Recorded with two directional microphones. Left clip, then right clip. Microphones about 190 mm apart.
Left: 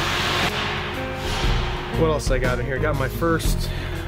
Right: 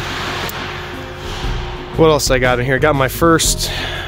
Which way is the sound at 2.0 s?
60° right (ahead or behind).